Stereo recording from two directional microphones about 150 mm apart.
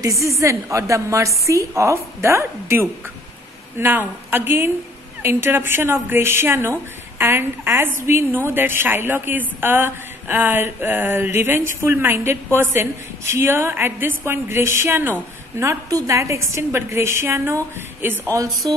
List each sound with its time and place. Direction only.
0.0 s a woman's voice: 20° right (ahead or behind)
3.7 s a sound: 15° right (ahead or behind)
15.6 s a woman's voice: 20° right (ahead or behind)